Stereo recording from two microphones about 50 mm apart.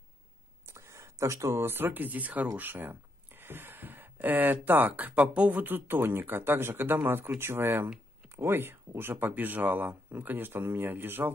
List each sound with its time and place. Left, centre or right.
0.7 s a sound: right
1.7 s speech: right
2.7 s a sound: right
5.1 s speech: right
5.5 s speech: right
9.3 s speech: right